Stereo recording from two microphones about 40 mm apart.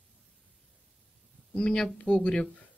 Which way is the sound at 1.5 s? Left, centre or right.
Left.